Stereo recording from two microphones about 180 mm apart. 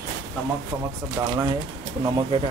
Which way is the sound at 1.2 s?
15° right (ahead or behind).